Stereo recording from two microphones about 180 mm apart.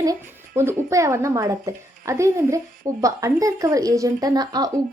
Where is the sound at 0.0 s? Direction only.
15° right (ahead or behind).